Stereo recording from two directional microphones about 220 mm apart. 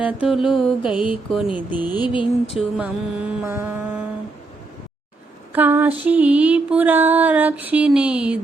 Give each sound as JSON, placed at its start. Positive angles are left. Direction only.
{"t": 0.2, "sound": "a sound", "side_deg": 0}
{"t": 0.9, "sound": "music", "side_deg": 20}
{"t": 1.1, "sound": "a sound", "side_deg": -5}
{"t": 2.0, "sound": "music", "side_deg": 20}
{"t": 2.6, "sound": "music", "side_deg": -5}
{"t": 5.5, "sound": "music", "side_deg": -10}